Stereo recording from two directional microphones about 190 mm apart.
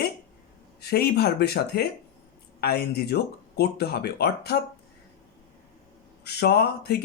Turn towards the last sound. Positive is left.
turn(degrees=60)  # may be behind; listen again after turning